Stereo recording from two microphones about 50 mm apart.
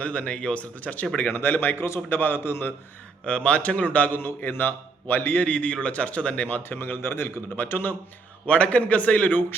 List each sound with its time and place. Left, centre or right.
0.0 s speech: left
1.3 s speech: left
1.7 s a man's voice: left
2.0 s a man's voice: left
3.2 s speech: left
4.4 s a man's voice: left
5.5 s speech: left
6.6 s a man's voice: left
8.4 s speech: left